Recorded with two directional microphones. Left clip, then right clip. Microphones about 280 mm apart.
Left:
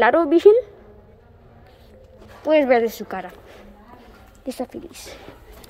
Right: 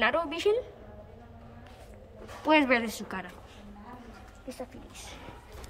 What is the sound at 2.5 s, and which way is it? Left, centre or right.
Speech, centre.